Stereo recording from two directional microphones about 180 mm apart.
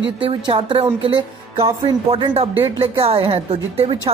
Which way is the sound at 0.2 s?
30° right (ahead or behind).